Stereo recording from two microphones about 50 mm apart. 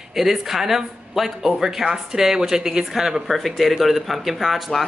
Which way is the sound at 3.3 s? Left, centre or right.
Centre.